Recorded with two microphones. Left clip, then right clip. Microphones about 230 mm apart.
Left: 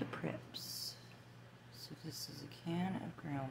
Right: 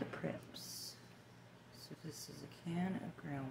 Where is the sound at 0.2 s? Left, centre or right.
Centre.